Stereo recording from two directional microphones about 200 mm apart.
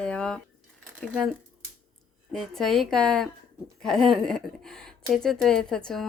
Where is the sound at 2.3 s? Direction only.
Centre (ahead or behind).